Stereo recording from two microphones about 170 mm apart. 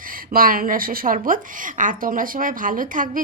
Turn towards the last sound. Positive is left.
turn(degrees=-50)  # may be behind; listen again after turning